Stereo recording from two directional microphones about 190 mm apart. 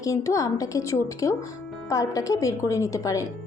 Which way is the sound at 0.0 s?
15° left (ahead or behind).